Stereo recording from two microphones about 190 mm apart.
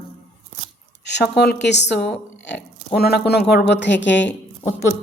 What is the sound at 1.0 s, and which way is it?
Speech, 65° left (ahead or behind).